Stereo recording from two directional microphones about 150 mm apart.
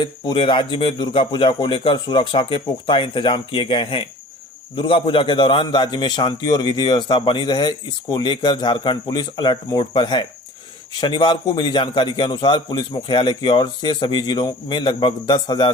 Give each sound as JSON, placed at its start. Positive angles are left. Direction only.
{"t": 0.0, "sound": "a man's voice", "side_deg": 35}